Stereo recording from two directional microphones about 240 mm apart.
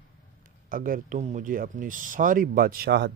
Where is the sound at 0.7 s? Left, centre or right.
Right.